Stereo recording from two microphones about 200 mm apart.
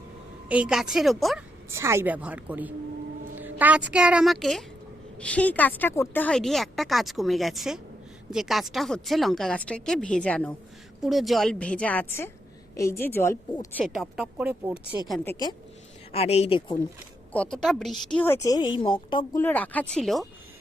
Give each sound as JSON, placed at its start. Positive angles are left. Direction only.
{"t": 0.4, "sound": "a woman's voice", "side_deg": -5}
{"t": 1.7, "sound": "a woman's voice", "side_deg": -15}
{"t": 13.7, "sound": "a woman's voice", "side_deg": 0}
{"t": 15.2, "sound": "a woman's voice", "side_deg": 15}
{"t": 16.1, "sound": "speech", "side_deg": 30}
{"t": 17.3, "sound": "a woman's voice", "side_deg": 5}
{"t": 19.4, "sound": "a woman's voice", "side_deg": 10}